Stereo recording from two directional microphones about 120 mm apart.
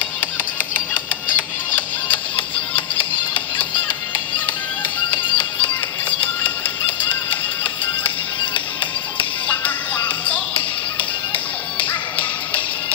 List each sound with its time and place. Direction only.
2.3 s music: 45° left (ahead or behind)
5.3 s music: 45° left (ahead or behind)
7.8 s music: 45° left (ahead or behind)